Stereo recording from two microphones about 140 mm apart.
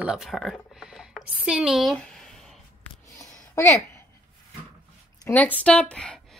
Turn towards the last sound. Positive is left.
turn(degrees=5)  # may be behind; listen again after turning